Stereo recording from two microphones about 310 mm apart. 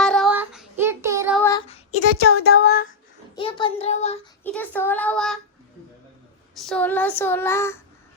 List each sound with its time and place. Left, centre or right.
0.0 s child singing: centre
1.4 s child singing: centre
2.0 s speech: right
2.4 s a sound: left
3.3 s child singing: centre
4.4 s child singing: centre
6.5 s child singing: centre